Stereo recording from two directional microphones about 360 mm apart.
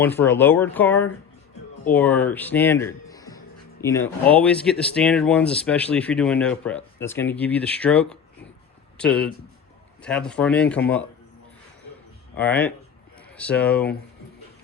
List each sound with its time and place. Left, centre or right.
0.0 s speech: centre
12.4 s speech: centre